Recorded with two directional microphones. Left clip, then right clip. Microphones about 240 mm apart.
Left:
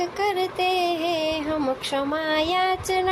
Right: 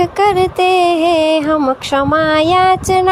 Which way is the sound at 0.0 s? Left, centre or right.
Right.